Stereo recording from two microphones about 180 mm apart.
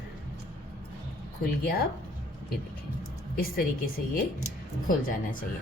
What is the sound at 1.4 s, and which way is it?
Speech, 55° left (ahead or behind).